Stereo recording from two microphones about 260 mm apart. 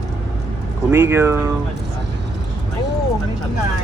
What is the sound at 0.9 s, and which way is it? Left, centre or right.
Speech, centre.